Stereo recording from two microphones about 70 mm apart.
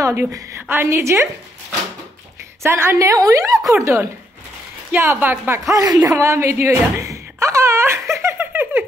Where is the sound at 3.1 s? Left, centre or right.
Right.